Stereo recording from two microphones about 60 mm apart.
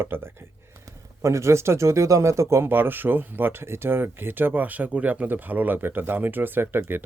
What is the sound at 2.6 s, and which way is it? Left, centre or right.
Speech, right.